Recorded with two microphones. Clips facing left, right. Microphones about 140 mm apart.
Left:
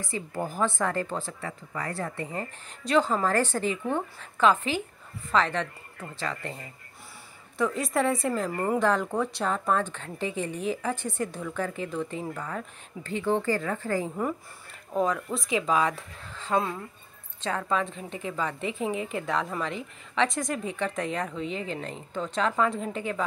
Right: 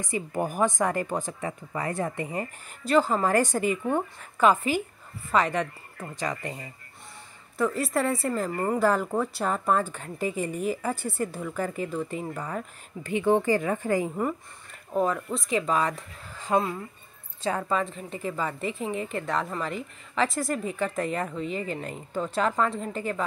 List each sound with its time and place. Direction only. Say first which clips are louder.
0.0 s a woman's voice: right 3 dB; 15° right (ahead or behind)
2.8 s a woman's voice: right 1 dB; 5° right (ahead or behind)
7.5 s a woman's voice: right 1 dB; centre (ahead or behind)
14.9 s a woman's voice: right 1 dB; 5° right (ahead or behind)